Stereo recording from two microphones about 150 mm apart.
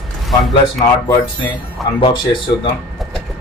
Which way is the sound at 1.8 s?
Centre (ahead or behind).